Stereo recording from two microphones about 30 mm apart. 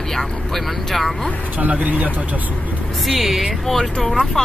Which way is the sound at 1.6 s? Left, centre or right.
Right.